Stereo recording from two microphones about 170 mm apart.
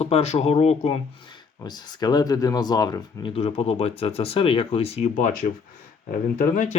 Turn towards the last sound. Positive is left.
turn(degrees=50)  # may be behind; listen again after turning